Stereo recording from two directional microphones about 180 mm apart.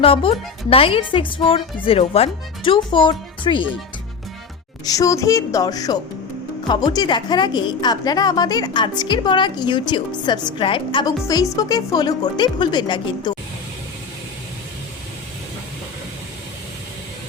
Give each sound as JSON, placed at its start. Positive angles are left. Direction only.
{"t": 0.0, "sound": "a woman's voice", "side_deg": 30}
{"t": 4.9, "sound": "a woman's voice", "side_deg": 20}